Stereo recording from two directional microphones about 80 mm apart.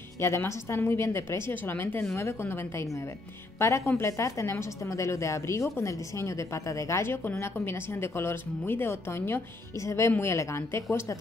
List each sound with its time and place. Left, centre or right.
0.2 s a woman's voice: left